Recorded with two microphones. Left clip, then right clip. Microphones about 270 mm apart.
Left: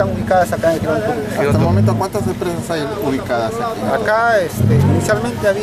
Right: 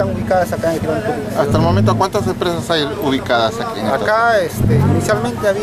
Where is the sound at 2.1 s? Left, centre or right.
Centre.